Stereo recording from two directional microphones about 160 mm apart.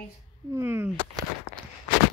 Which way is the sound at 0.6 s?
15° right (ahead or behind).